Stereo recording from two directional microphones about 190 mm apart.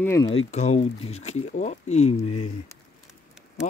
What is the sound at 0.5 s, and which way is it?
Speech, 35° left (ahead or behind).